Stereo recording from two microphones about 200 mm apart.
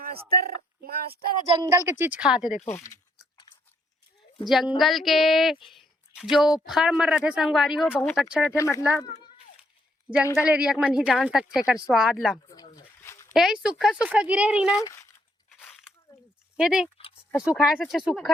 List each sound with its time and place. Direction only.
0.3 s speech: 50° right (ahead or behind)
1.5 s speech: 15° right (ahead or behind)
2.6 s speech: 15° left (ahead or behind)
3.3 s chewing: 20° left (ahead or behind)
4.4 s speech: centre (ahead or behind)
8.5 s speech: 15° left (ahead or behind)
10.3 s speech: 5° right (ahead or behind)
12.5 s dog: 15° left (ahead or behind)
13.3 s speech: 5° right (ahead or behind)
14.7 s speech: 15° left (ahead or behind)
15.5 s a sound: centre (ahead or behind)
16.6 s speech: 5° right (ahead or behind)